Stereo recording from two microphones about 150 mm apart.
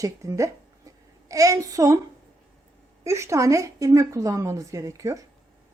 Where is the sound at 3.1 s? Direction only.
20° right (ahead or behind).